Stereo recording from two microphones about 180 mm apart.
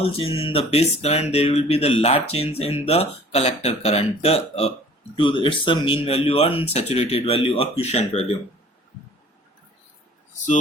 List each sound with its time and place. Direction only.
0.0 s speech: 30° left (ahead or behind)